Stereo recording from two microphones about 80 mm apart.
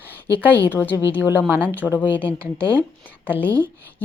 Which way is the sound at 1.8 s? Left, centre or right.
Centre.